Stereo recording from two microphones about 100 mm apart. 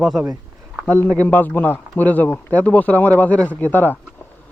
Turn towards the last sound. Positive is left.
turn(degrees=20)  # may be behind; listen again after turning